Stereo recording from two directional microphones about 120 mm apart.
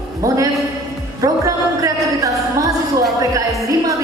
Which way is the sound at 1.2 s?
30° right (ahead or behind).